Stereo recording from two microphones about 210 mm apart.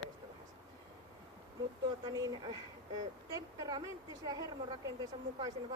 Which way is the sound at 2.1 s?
20° right (ahead or behind).